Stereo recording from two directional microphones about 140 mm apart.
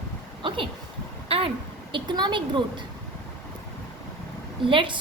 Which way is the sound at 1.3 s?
40° right (ahead or behind).